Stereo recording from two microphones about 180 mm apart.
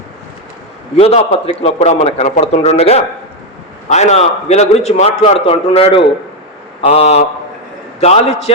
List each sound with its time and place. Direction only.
0.9 s a man's voice: 35° left (ahead or behind)